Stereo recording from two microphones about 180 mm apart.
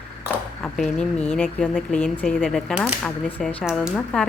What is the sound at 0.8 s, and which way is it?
Speech, 5° left (ahead or behind).